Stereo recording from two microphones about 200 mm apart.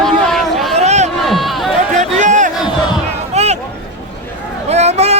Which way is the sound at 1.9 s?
35° right (ahead or behind).